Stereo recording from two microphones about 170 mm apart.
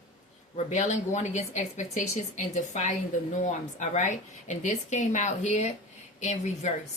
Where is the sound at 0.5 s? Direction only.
45° left (ahead or behind).